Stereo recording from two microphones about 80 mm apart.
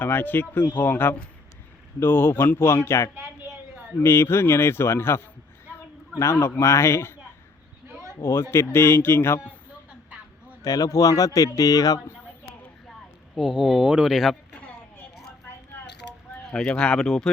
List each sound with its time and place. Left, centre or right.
0.0 s speech: left
6.6 s speech: left
8.2 s speech: left
10.6 s speech: left
13.4 s speech: centre
16.4 s speech: centre